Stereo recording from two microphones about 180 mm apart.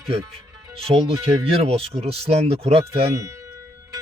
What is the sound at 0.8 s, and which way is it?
Speech, 35° right (ahead or behind).